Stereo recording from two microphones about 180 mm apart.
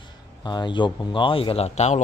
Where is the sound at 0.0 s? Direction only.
25° left (ahead or behind).